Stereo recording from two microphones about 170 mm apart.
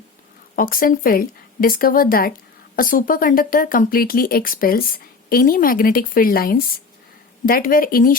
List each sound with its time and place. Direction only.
0.5 s a woman's voice: 55° left (ahead or behind)